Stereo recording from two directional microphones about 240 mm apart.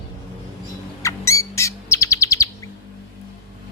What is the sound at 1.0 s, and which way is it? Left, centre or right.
Bird, centre.